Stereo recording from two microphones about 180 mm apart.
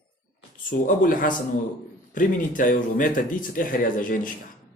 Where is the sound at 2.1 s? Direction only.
50° left (ahead or behind).